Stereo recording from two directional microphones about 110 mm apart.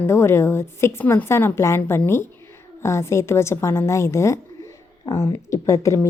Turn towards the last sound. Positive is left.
turn(degrees=25)  # may be behind; listen again after turning